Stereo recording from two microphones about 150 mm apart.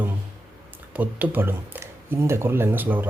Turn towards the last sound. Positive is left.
turn(degrees=-10)  # may be behind; listen again after turning